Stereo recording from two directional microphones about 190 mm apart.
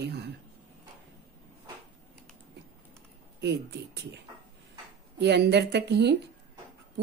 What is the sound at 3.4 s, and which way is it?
Speech, 65° right (ahead or behind).